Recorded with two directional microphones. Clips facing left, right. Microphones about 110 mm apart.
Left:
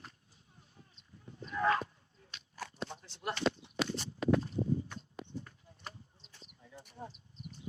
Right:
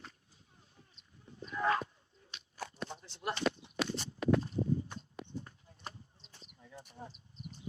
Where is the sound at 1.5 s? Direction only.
25° right (ahead or behind).